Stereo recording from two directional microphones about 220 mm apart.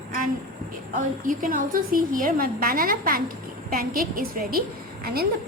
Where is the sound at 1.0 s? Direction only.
35° right (ahead or behind).